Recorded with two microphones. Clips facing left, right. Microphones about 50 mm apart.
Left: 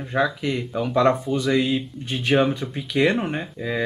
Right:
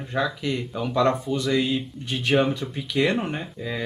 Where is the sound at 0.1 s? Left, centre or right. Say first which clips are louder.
Left 3 dB; centre.